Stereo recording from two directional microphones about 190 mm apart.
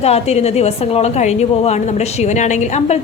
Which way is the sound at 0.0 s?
35° left (ahead or behind).